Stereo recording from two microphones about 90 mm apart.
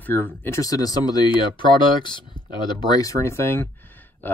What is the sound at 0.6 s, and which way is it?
Speech, 45° left (ahead or behind).